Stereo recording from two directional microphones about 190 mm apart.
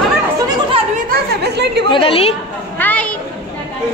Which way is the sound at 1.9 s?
30° left (ahead or behind).